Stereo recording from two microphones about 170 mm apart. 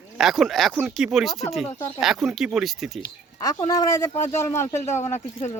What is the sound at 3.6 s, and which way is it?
Speech, 20° left (ahead or behind).